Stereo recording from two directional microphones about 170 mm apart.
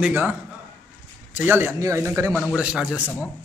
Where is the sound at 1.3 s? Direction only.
10° right (ahead or behind).